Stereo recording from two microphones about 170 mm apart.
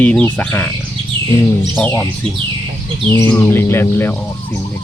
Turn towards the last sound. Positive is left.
turn(degrees=15)  # may be behind; listen again after turning